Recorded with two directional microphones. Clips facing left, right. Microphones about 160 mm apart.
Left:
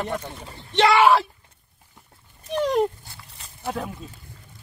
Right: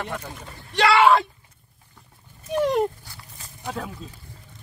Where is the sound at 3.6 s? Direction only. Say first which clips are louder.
Left 3 dB; 10° left (ahead or behind).